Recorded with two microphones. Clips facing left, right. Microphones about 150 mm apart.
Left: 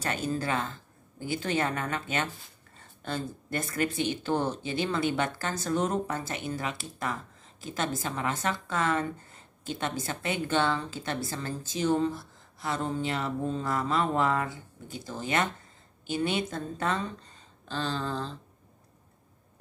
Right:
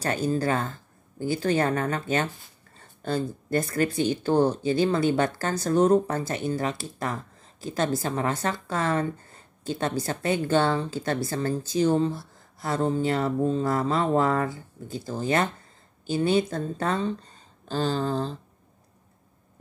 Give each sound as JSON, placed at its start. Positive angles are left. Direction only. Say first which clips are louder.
{"t": 0.0, "sound": "a woman's voice", "louder": "right 6 dB", "side_deg": -35}